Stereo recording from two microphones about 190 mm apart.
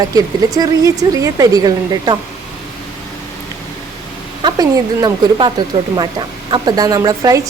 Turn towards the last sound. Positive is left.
turn(degrees=-20)  # may be behind; listen again after turning